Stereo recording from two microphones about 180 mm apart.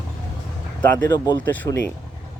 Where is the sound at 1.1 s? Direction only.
25° left (ahead or behind).